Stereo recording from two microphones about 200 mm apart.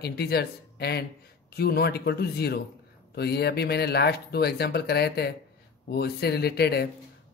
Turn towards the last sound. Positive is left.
turn(degrees=55)  # may be behind; listen again after turning